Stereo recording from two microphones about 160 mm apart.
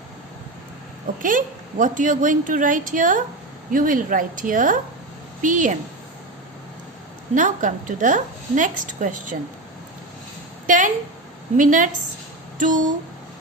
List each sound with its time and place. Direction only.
1.2 s a woman's voice: 55° right (ahead or behind)
7.3 s a woman's voice: 55° right (ahead or behind)
10.7 s a woman's voice: 55° right (ahead or behind)
12.5 s a sound: 55° right (ahead or behind)